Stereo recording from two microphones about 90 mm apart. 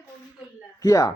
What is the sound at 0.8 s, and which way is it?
Speech, 35° left (ahead or behind).